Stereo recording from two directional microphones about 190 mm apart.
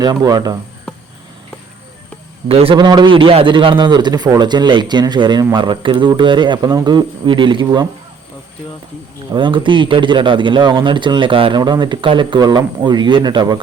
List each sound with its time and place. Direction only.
0.0 s a man's voice: 20° right (ahead or behind)
2.5 s a man's voice: 30° right (ahead or behind)
9.3 s a man's voice: 25° right (ahead or behind)